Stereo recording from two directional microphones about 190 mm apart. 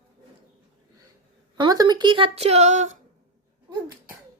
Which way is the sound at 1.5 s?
20° right (ahead or behind).